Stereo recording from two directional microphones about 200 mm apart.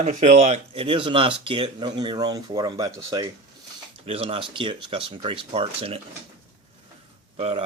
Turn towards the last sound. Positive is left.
turn(degrees=-30)  # may be behind; listen again after turning